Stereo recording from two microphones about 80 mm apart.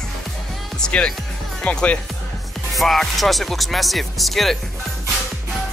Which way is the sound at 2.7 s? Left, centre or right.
Centre.